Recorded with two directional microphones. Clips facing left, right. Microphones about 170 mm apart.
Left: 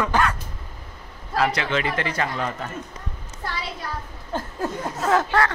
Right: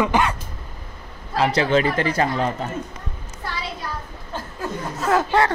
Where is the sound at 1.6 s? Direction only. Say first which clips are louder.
Right 6 dB; 40° right (ahead or behind).